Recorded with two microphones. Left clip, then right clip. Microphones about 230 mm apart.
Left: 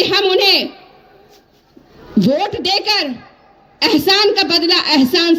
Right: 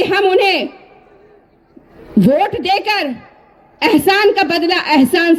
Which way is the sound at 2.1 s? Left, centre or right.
Right.